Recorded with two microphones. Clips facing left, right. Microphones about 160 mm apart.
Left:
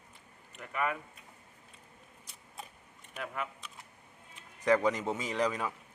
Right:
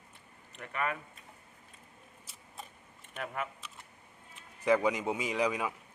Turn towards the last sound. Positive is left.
turn(degrees=-10)  # may be behind; listen again after turning